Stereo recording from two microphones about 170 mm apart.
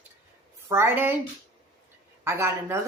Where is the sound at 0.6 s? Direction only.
15° right (ahead or behind).